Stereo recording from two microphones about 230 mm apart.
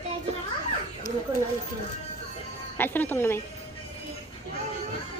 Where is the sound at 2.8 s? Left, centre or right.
Centre.